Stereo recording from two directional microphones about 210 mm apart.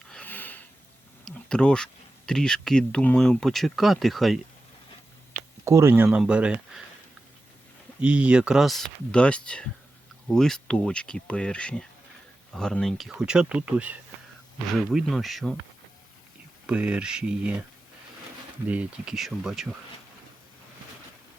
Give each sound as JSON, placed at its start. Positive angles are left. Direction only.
{"t": 0.1, "sound": "a sound", "side_deg": 5}
{"t": 1.2, "sound": "speech", "side_deg": 5}
{"t": 5.6, "sound": "speech", "side_deg": -15}
{"t": 8.0, "sound": "speech", "side_deg": -5}
{"t": 16.6, "sound": "speech", "side_deg": -5}
{"t": 18.7, "sound": "speech", "side_deg": -5}